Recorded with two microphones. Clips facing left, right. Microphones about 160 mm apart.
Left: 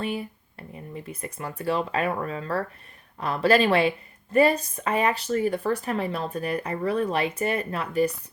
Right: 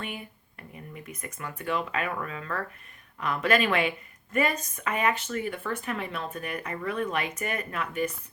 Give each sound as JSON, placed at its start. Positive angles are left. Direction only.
{"t": 0.0, "sound": "speech", "side_deg": 30}